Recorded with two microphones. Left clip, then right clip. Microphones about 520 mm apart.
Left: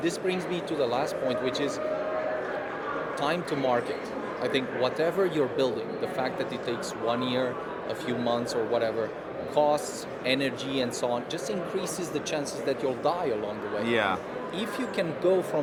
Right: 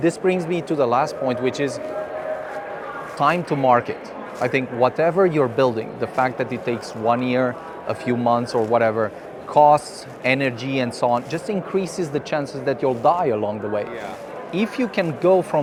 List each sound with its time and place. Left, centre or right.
0.0 s speech: right
3.2 s speech: right
14.5 s speech: right